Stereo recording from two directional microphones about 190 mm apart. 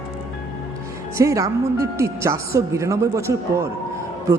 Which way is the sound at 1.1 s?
15° right (ahead or behind).